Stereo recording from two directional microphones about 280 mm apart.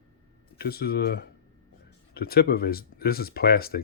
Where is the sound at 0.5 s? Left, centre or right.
Left.